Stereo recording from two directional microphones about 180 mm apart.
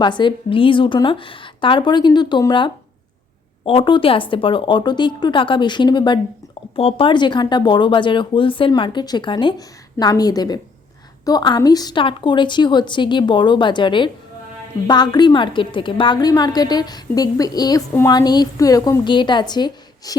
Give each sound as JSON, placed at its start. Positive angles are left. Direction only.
{"t": 0.0, "sound": "a woman's voice", "side_deg": 25}